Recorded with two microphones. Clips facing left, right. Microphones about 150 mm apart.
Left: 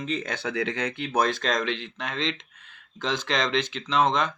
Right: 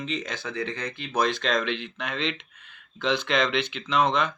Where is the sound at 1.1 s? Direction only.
45° left (ahead or behind).